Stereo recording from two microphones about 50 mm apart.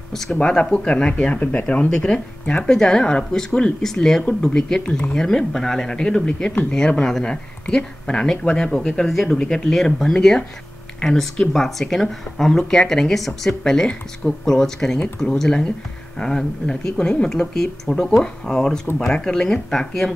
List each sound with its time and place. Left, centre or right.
0.1 s speech: centre
0.4 s speech: centre
1.9 s speech: centre